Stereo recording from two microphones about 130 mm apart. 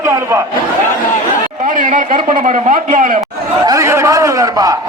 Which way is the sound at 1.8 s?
80° right.